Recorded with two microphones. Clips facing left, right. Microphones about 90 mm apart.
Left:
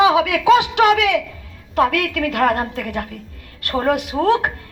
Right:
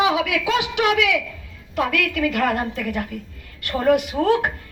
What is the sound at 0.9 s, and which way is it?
Speech, 40° left (ahead or behind).